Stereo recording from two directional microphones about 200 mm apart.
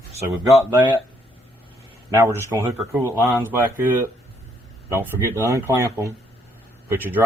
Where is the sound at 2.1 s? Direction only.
15° right (ahead or behind).